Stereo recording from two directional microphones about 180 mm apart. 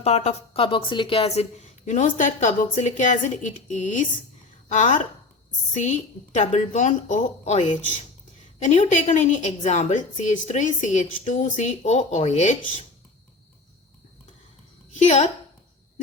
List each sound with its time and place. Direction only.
0.0 s a woman's voice: 35° left (ahead or behind)
14.9 s a woman's voice: 40° left (ahead or behind)